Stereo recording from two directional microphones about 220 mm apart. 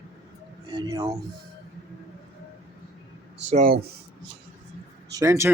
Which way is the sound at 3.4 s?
35° right (ahead or behind).